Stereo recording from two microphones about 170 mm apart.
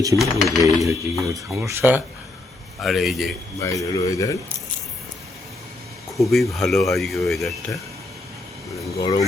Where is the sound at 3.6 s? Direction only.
20° left (ahead or behind).